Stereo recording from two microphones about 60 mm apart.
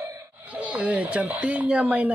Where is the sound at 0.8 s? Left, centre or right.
Right.